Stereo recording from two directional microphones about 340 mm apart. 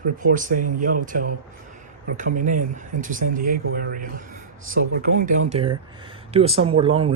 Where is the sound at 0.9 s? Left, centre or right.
Right.